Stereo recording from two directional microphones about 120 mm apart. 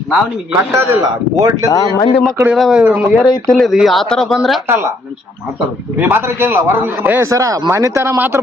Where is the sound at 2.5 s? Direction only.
Centre (ahead or behind).